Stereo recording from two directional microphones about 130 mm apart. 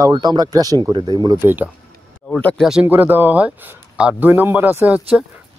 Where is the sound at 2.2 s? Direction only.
10° left (ahead or behind).